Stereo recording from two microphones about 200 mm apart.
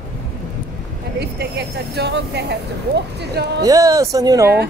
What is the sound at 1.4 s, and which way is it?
Speech, 55° right (ahead or behind).